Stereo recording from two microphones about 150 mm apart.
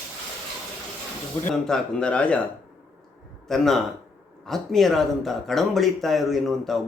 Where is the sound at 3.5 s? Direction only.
Centre (ahead or behind).